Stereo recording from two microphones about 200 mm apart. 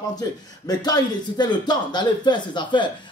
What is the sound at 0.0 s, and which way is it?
Speech, 20° left (ahead or behind).